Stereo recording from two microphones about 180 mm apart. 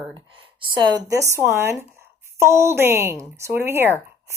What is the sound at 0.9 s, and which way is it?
Speech, 20° right (ahead or behind).